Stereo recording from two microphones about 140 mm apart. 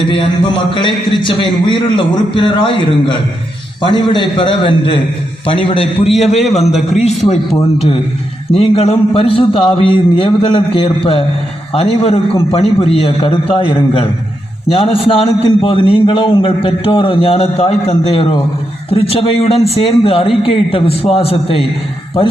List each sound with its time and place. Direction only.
0.1 s a man's voice: 35° left (ahead or behind)
6.1 s a man's voice: centre (ahead or behind)
6.5 s a man's voice: 50° left (ahead or behind)
8.5 s a man's voice: 45° left (ahead or behind)